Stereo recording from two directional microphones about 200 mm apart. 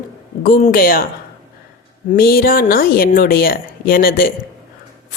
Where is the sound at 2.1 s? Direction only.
50° left (ahead or behind).